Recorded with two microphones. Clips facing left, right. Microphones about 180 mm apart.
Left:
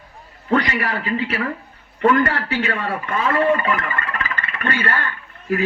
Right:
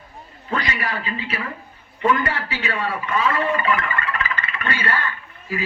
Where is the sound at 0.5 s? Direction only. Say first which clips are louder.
Left 6 dB; 60° left (ahead or behind).